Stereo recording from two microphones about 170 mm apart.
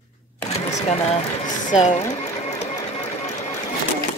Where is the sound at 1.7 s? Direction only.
45° left (ahead or behind).